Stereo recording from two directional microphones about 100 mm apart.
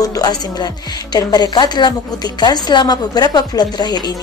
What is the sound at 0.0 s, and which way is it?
A woman's voice, 40° left (ahead or behind).